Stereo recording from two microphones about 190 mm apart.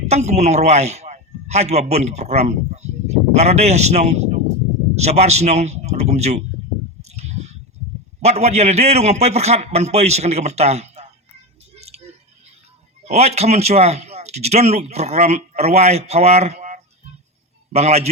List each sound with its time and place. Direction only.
0.1 s a man's voice: 35° right (ahead or behind)
7.0 s squish: 35° right (ahead or behind)
8.2 s a man's voice: 35° right (ahead or behind)
11.7 s a sound: 35° right (ahead or behind)
13.1 s a man's voice: 35° right (ahead or behind)